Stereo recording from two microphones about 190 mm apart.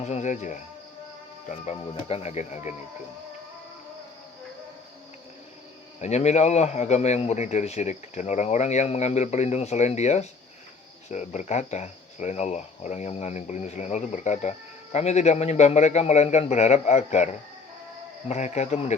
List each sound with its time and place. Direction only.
0.0 s a man's voice: 35° left (ahead or behind)
6.0 s a man's voice: 35° left (ahead or behind)
18.3 s a man's voice: 35° left (ahead or behind)